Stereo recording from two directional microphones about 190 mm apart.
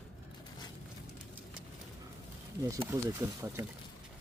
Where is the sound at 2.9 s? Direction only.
15° right (ahead or behind).